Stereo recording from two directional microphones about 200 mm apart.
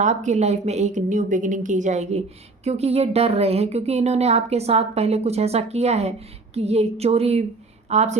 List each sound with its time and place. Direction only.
0.0 s a woman's voice: 35° right (ahead or behind)